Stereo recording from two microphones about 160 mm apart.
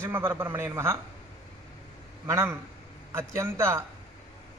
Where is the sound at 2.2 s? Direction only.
15° right (ahead or behind).